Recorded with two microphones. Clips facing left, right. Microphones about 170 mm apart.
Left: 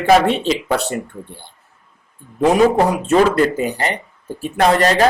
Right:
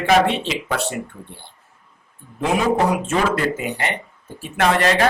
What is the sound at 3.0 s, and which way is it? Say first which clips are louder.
Speech: left 6 dB; 35° left (ahead or behind).